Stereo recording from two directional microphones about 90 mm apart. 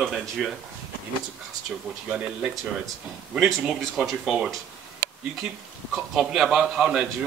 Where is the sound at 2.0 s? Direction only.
10° right (ahead or behind).